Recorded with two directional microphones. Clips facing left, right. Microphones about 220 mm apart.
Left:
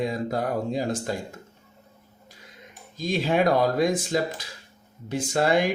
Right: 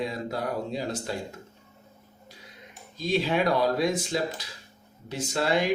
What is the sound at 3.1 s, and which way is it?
A man's voice, 45° left (ahead or behind).